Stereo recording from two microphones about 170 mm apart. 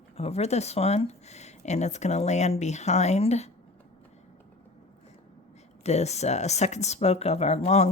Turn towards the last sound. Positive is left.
turn(degrees=40)  # may be behind; listen again after turning